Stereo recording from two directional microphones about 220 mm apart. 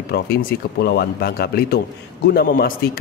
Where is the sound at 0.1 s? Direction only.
45° left (ahead or behind).